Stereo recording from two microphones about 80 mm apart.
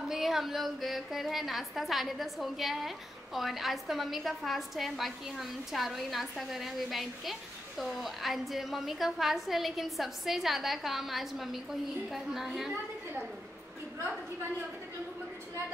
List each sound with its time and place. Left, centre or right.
0.1 s a woman's voice: centre